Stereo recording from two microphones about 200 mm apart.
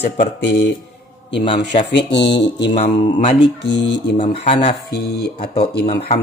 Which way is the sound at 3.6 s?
60° left (ahead or behind).